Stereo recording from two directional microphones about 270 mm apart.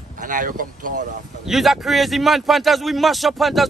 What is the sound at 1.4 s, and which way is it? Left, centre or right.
A man's voice, centre.